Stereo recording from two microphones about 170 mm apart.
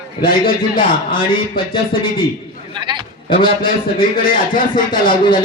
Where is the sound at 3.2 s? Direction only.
30° left (ahead or behind).